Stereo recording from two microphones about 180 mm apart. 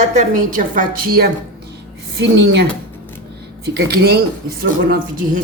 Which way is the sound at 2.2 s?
70° right (ahead or behind).